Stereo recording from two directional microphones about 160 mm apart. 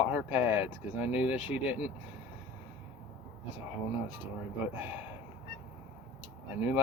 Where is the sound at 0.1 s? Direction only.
10° right (ahead or behind).